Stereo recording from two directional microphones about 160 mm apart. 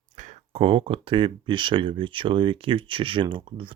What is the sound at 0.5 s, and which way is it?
Speech, 35° right (ahead or behind).